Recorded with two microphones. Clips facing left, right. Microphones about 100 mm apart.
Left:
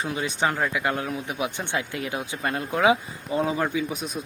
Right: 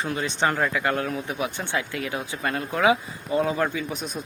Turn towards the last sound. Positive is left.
turn(degrees=5)  # may be behind; listen again after turning